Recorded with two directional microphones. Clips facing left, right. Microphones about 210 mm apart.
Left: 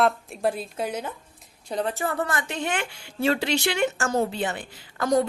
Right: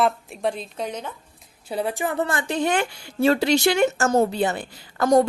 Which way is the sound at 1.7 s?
10° right (ahead or behind).